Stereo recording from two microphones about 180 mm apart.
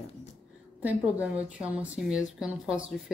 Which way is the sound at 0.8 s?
10° right (ahead or behind).